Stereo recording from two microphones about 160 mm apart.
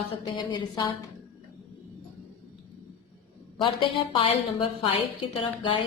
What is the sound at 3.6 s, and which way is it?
A woman's voice, 30° left (ahead or behind).